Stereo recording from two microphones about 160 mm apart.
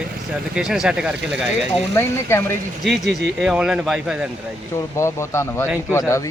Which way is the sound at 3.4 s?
5° right (ahead or behind).